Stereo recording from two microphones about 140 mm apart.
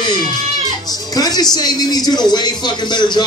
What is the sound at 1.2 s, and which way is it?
A man's voice, 30° left (ahead or behind).